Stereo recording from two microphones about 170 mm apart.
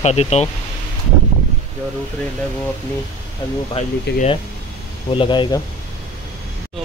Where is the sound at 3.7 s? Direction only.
40° left (ahead or behind).